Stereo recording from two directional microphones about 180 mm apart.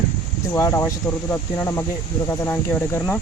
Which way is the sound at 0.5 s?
15° left (ahead or behind).